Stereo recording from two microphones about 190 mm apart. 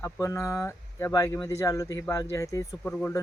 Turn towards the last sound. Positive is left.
turn(degrees=15)  # may be behind; listen again after turning